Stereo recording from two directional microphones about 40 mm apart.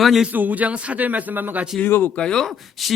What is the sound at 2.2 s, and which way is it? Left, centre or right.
Speech, left.